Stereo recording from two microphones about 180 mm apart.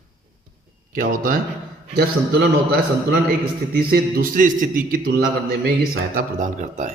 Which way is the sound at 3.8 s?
55° right (ahead or behind).